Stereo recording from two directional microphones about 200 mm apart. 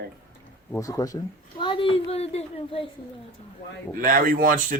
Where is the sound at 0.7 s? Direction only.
15° left (ahead or behind).